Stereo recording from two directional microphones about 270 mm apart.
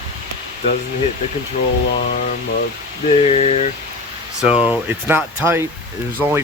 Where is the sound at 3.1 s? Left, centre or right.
Left.